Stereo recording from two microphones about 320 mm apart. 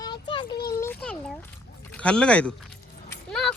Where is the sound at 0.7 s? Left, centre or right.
Centre.